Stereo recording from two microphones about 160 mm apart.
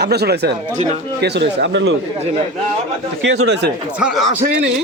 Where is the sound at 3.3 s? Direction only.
90° right.